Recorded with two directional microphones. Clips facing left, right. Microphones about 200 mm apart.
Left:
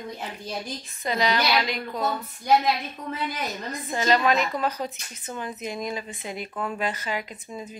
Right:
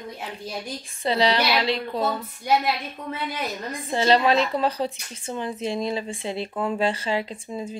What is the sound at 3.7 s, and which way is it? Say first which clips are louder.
Speech: right 4 dB; 30° right (ahead or behind).